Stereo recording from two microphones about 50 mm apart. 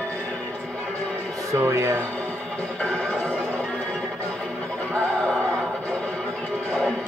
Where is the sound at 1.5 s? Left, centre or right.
Right.